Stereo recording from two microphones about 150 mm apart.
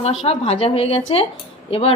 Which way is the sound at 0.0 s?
45° left (ahead or behind).